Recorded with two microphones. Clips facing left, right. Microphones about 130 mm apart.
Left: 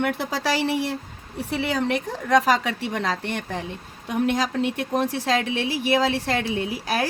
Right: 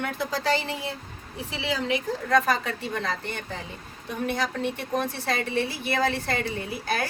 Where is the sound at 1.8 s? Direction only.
65° left (ahead or behind).